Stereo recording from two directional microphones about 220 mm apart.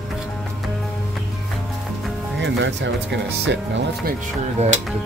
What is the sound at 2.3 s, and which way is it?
Music, 55° right (ahead or behind).